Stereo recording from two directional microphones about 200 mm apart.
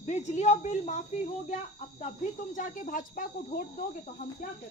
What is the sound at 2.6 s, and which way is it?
Speech, 40° left (ahead or behind).